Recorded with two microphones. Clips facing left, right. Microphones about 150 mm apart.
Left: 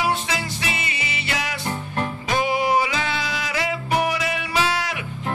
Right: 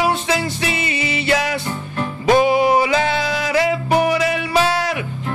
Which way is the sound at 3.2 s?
35° right (ahead or behind).